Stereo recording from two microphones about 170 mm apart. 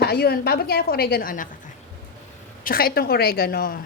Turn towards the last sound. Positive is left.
turn(degrees=65)  # may be behind; listen again after turning